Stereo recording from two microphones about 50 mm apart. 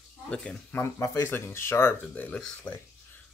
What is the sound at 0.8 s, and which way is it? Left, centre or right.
Speech, left.